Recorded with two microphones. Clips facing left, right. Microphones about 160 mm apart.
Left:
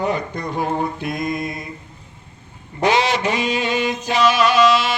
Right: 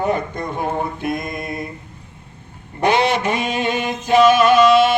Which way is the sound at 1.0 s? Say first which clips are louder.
Left 1 dB; 50° right (ahead or behind).